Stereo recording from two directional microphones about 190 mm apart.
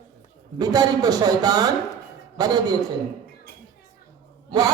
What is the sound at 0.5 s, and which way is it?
A man's voice, 20° right (ahead or behind).